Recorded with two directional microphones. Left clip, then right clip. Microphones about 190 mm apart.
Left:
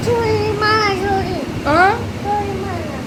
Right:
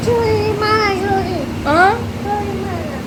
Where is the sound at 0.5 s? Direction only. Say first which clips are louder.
Even; 10° right (ahead or behind).